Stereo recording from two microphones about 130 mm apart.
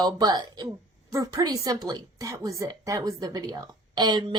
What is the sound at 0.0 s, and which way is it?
A woman's voice, 30° right (ahead or behind).